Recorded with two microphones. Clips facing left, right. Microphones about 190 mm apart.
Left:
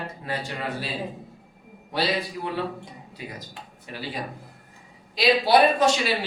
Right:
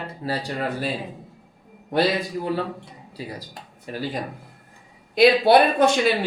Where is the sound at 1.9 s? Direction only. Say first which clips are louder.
Right 5 dB; 50° right (ahead or behind).